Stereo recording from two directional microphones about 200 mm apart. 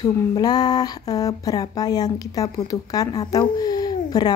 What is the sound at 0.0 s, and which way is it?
A woman's voice, 20° left (ahead or behind).